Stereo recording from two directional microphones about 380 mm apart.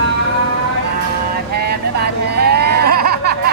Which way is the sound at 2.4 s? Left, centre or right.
Right.